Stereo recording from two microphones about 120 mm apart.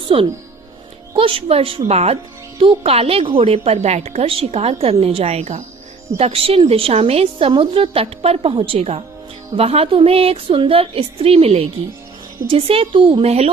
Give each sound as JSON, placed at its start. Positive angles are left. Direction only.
{"t": 0.1, "sound": "a woman's voice", "side_deg": -50}
{"t": 6.1, "sound": "a woman's voice", "side_deg": -55}